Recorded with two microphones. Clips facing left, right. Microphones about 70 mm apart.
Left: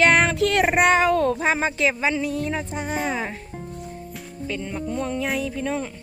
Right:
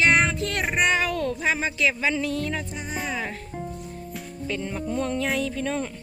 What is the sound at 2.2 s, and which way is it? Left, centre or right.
Speech, centre.